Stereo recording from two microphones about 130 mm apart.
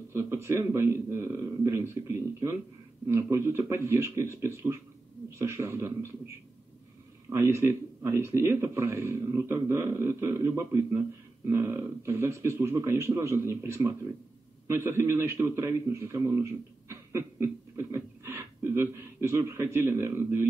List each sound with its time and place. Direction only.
0.1 s a man's voice: 20° right (ahead or behind)
3.1 s a man's voice: 20° right (ahead or behind)